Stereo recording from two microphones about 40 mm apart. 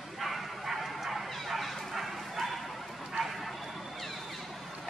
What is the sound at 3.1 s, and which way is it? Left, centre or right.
Vehicle, centre.